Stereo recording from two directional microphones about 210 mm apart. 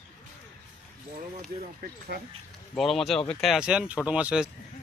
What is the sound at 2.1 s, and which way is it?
Speech, 45° right (ahead or behind).